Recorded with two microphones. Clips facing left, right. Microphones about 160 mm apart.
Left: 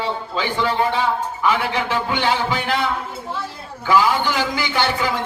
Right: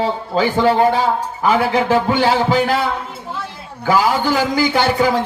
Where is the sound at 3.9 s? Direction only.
40° right (ahead or behind).